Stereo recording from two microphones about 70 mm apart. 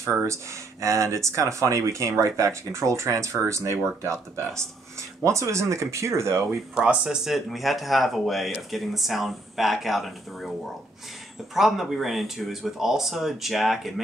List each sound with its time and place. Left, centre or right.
0.0 s speech: right
6.5 s speech: centre
7.2 s speech: centre
11.5 s speech: centre